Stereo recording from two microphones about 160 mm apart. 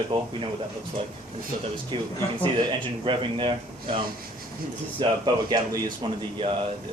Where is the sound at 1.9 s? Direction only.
30° right (ahead or behind).